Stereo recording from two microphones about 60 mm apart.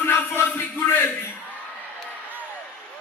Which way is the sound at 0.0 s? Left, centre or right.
Left.